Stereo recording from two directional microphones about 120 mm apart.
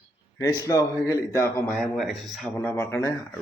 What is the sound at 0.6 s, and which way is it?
Speech, 25° left (ahead or behind).